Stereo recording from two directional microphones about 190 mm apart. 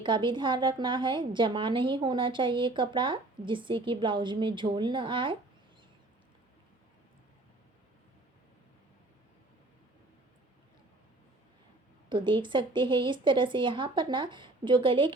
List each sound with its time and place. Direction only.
0.0 s a woman's voice: 25° right (ahead or behind)
12.0 s a woman's voice: 25° right (ahead or behind)